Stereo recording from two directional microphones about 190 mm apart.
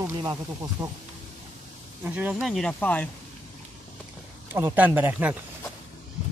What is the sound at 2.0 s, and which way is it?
Speech, 10° right (ahead or behind).